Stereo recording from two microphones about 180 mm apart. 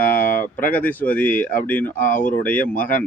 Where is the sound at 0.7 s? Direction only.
10° left (ahead or behind).